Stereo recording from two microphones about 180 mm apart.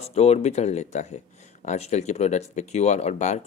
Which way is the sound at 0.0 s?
35° left (ahead or behind).